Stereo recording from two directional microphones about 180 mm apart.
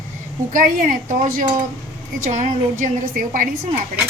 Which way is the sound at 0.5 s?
50° right (ahead or behind).